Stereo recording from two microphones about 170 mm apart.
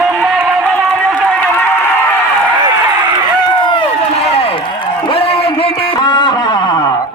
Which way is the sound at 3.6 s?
30° left (ahead or behind).